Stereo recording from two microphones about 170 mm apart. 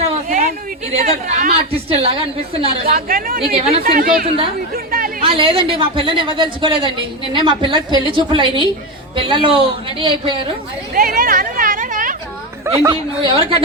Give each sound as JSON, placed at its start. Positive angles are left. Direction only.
{"t": 0.0, "sound": "chatter", "side_deg": -50}
{"t": 1.5, "sound": "a woman's voice", "side_deg": -35}
{"t": 2.9, "sound": "speech", "side_deg": -55}
{"t": 3.4, "sound": "a woman's voice", "side_deg": -35}
{"t": 3.8, "sound": "speech", "side_deg": -60}
{"t": 4.9, "sound": "chatter", "side_deg": -55}
{"t": 5.2, "sound": "speech", "side_deg": -30}
{"t": 10.9, "sound": "a sound", "side_deg": -55}
{"t": 12.7, "sound": "speech", "side_deg": -15}
{"t": 13.2, "sound": "a woman's voice", "side_deg": -35}